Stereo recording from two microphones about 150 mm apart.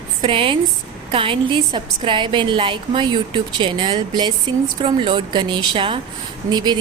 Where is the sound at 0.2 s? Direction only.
35° right (ahead or behind).